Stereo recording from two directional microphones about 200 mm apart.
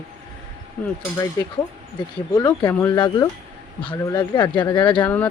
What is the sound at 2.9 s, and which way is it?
Speech, 20° left (ahead or behind).